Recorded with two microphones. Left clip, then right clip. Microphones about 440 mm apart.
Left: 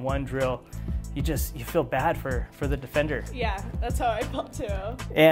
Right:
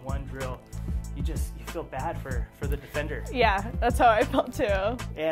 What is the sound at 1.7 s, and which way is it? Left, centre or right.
Speech, left.